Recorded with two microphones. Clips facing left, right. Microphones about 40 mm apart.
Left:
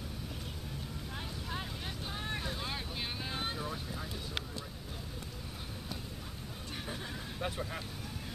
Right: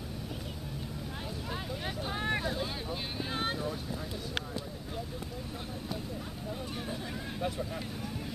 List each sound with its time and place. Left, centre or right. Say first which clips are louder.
2.0 s boat: right 8 dB; right
7.4 s vehicle: right 2 dB; centre